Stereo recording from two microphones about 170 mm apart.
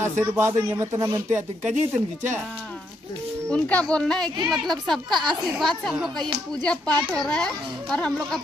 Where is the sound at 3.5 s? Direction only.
5° left (ahead or behind).